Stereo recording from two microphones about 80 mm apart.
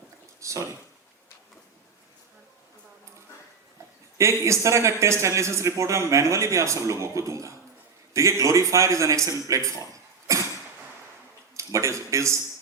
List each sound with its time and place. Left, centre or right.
0.3 s a sound: right
4.2 s a man's voice: right
11.5 s speech: right